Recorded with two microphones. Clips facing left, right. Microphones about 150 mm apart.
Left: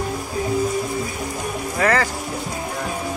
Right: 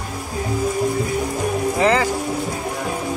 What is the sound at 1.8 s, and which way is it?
Music, 15° right (ahead or behind).